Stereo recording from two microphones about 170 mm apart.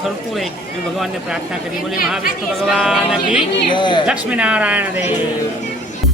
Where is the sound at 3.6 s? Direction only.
30° left (ahead or behind).